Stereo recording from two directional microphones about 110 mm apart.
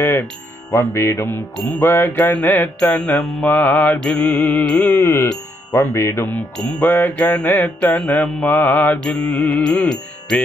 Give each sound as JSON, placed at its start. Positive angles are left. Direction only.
{"t": 0.0, "sound": "music", "side_deg": 20}
{"t": 0.7, "sound": "mantra", "side_deg": 25}
{"t": 5.0, "sound": "music", "side_deg": 25}
{"t": 6.3, "sound": "mantra", "side_deg": 15}